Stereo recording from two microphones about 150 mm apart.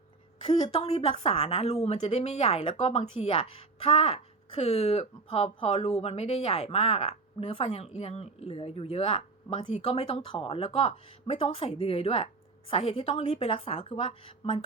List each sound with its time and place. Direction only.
0.7 s a woman's voice: 40° left (ahead or behind)